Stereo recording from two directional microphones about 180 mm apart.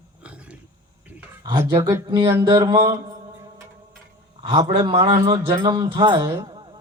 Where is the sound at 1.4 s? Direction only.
25° right (ahead or behind).